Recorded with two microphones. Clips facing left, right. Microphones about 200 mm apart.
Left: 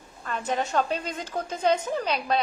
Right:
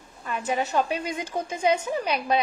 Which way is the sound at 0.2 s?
10° right (ahead or behind).